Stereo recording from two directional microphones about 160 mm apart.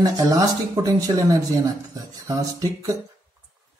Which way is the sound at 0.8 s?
20° right (ahead or behind).